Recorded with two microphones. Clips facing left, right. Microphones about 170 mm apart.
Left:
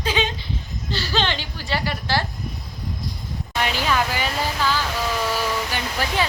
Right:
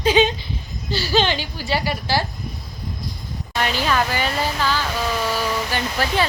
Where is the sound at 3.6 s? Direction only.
10° left (ahead or behind).